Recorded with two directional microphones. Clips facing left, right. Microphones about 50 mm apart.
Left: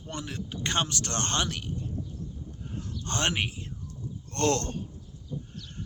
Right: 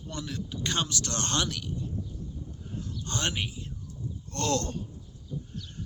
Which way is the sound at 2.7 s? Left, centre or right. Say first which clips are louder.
Left 2 dB; left.